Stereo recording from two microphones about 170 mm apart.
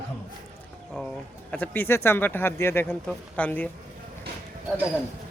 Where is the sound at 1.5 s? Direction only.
10° left (ahead or behind).